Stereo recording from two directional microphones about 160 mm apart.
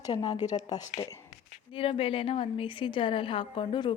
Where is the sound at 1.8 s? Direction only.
35° left (ahead or behind).